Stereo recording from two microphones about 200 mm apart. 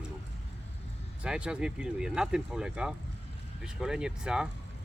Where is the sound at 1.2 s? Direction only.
5° right (ahead or behind).